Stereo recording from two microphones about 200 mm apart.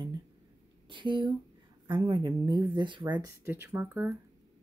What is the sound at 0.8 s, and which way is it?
Speech, 25° right (ahead or behind).